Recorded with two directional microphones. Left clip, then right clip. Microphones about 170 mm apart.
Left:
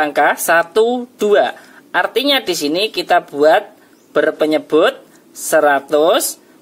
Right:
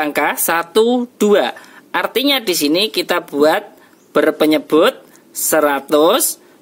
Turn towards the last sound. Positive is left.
turn(degrees=-50)  # may be behind; listen again after turning